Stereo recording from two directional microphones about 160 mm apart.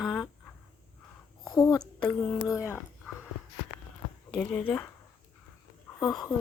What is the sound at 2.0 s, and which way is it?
Speech, 5° left (ahead or behind).